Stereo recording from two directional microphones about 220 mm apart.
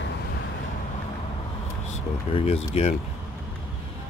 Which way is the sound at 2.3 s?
30° left (ahead or behind).